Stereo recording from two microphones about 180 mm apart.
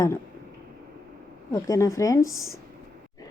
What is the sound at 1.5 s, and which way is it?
Speech, 20° left (ahead or behind).